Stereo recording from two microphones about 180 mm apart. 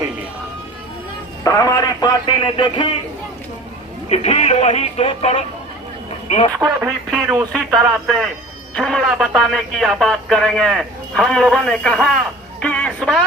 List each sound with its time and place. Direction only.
1.5 s speech: 20° left (ahead or behind)
4.1 s speech: 35° left (ahead or behind)
6.6 s speech: centre (ahead or behind)
12.5 s music: 5° left (ahead or behind)